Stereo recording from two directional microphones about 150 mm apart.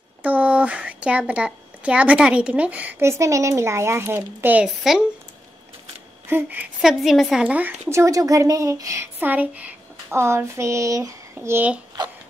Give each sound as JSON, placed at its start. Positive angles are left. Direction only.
{"t": 0.2, "sound": "speech", "side_deg": -10}
{"t": 6.2, "sound": "a woman's voice", "side_deg": -10}